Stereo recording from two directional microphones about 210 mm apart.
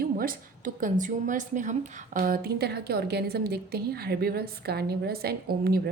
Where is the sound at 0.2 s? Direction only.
40° right (ahead or behind).